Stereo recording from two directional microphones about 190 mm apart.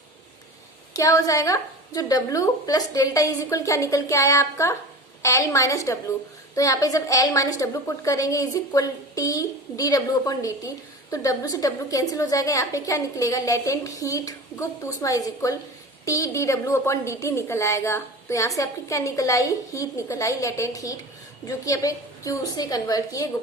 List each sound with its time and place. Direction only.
0.9 s a woman's voice: 15° left (ahead or behind)